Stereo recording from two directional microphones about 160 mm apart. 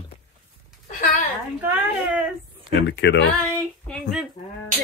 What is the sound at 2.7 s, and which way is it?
Speech, 90° left.